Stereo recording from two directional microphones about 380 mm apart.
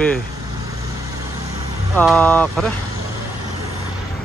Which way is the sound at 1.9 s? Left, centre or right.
Centre.